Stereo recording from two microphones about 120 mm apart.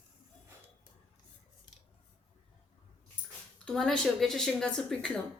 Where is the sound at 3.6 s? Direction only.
5° left (ahead or behind).